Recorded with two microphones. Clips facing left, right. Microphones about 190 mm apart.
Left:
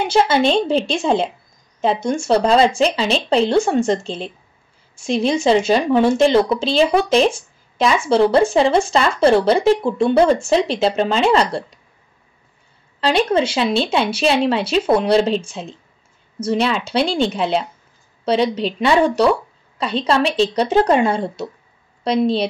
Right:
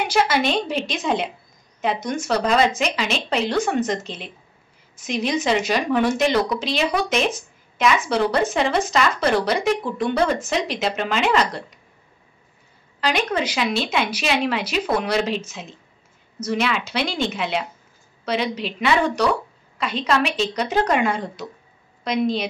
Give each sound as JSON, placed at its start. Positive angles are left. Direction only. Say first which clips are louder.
{"t": 0.0, "sound": "a woman's voice", "louder": "left 5 dB", "side_deg": 25}
{"t": 13.0, "sound": "speech", "louder": "left 6 dB", "side_deg": 30}